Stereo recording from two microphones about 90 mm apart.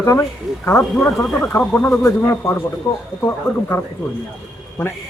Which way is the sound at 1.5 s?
35° left (ahead or behind).